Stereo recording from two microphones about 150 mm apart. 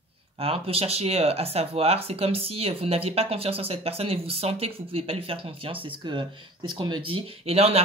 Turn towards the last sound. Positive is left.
turn(degrees=-40)  # may be behind; listen again after turning